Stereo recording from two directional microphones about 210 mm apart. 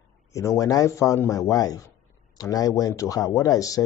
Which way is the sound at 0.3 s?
15° left (ahead or behind).